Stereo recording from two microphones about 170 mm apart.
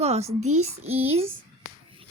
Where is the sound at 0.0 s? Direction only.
40° right (ahead or behind).